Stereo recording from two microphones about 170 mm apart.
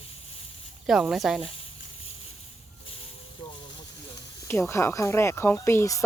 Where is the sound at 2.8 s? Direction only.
35° left (ahead or behind).